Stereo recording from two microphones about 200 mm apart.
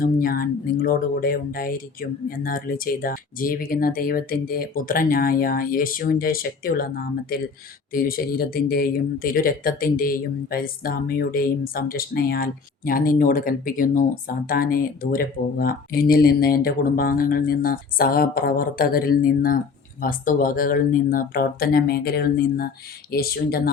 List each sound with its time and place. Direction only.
0.0 s speech: 45° left (ahead or behind)